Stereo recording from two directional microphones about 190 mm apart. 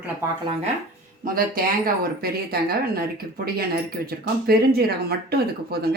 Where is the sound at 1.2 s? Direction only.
50° right (ahead or behind).